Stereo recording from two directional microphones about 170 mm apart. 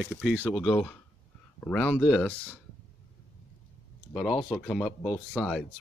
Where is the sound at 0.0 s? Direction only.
5° right (ahead or behind).